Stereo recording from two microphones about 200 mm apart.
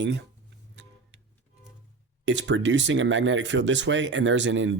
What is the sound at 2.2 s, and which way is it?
Speech, 65° right (ahead or behind).